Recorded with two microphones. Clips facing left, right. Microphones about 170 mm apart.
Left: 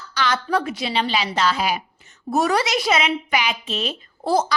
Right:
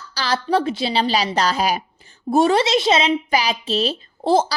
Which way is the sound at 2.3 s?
25° right (ahead or behind).